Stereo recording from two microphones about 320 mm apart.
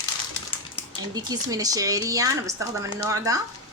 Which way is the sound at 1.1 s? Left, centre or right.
Centre.